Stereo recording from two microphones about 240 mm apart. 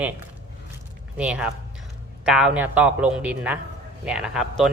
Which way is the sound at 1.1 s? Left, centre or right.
Centre.